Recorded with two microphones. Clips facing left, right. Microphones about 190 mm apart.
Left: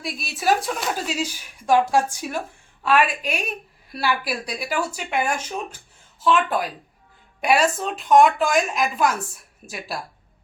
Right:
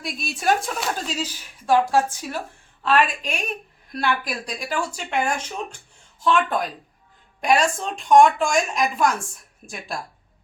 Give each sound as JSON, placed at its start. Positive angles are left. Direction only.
{"t": 0.0, "sound": "a woman's voice", "side_deg": 0}